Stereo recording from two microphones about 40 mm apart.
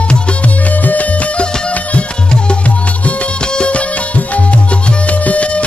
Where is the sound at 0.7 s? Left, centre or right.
Left.